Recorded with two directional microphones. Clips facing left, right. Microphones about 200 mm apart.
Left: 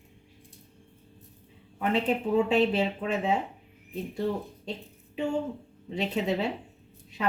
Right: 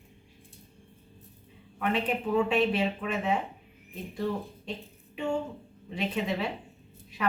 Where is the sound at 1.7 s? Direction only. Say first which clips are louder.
Left 2 dB; 25° left (ahead or behind).